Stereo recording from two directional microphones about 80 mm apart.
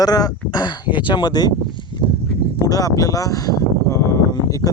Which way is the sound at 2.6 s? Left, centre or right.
Left.